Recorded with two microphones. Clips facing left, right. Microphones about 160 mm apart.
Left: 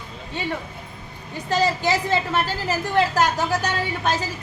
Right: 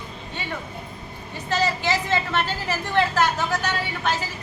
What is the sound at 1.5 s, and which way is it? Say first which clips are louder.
Speech: left 3 dB; 40° left (ahead or behind).